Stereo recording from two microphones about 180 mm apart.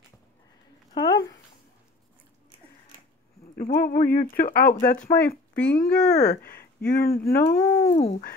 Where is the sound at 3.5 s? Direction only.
50° left (ahead or behind).